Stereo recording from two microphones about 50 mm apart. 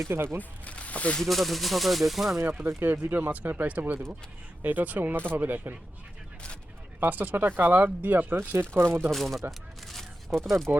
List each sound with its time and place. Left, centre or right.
0.1 s speech: right
0.6 s speech: left
1.2 s speech: centre
2.8 s speech: right
3.2 s speech: right
7.0 s speech: right
8.7 s speech: right
9.1 s speech: centre
9.5 s a sound: centre
10.7 s speech: right